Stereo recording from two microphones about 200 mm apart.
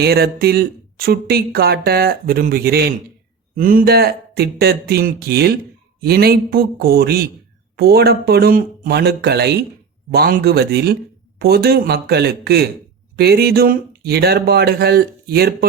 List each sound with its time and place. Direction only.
0.0 s speech: 50° right (ahead or behind)